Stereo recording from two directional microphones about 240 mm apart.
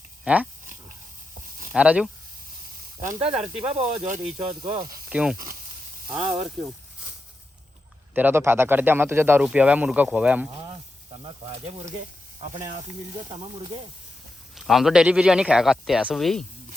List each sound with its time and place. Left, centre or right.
0.3 s a man's voice: centre
1.7 s a man's voice: centre
3.2 s speech: right
5.0 s a man's voice: centre
8.1 s speech: centre
13.2 s speech: right
14.5 s a man's voice: centre